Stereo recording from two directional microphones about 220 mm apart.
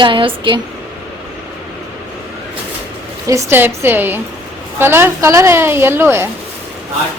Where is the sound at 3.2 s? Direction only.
10° right (ahead or behind).